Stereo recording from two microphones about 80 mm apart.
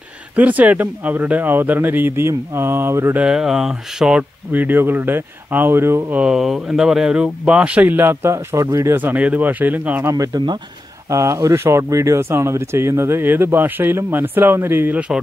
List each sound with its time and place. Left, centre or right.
0.4 s speech: centre
3.2 s speech: centre
4.5 s speech: right
6.1 s speech: centre; by 8.6 s right
8.9 s speech: right
10.0 s speech: right